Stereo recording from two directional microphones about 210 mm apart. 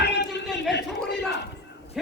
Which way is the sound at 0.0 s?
55° left (ahead or behind).